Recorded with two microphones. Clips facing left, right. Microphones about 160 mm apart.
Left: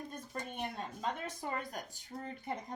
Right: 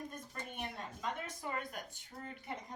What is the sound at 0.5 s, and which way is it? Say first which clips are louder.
Speech: left 2 dB; 35° left (ahead or behind).